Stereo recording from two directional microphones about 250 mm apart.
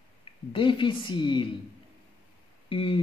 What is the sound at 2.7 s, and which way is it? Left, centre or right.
Speech, left.